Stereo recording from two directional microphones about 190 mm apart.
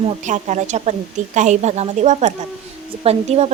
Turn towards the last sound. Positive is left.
turn(degrees=-35)  # may be behind; listen again after turning